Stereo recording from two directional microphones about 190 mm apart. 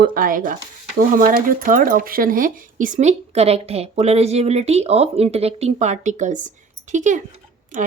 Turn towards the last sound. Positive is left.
turn(degrees=-45)  # may be behind; listen again after turning